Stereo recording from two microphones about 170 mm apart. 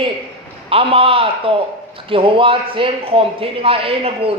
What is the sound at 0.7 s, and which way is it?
A man's voice, 35° right (ahead or behind).